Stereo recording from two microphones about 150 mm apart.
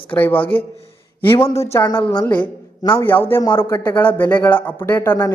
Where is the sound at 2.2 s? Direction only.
10° left (ahead or behind).